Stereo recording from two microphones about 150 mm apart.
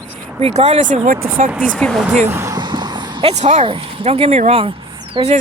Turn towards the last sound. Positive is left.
turn(degrees=-35)  # may be behind; listen again after turning